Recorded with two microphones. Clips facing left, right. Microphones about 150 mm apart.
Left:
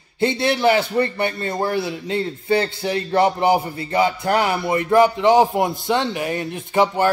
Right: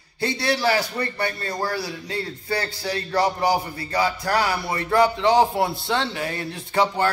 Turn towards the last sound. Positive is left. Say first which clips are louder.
# left 4 dB
turn(degrees=15)  # may be behind; listen again after turning